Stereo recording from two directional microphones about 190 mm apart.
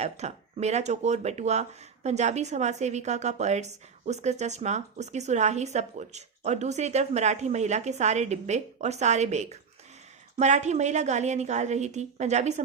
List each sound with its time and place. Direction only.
0.0 s a woman's voice: 35° right (ahead or behind)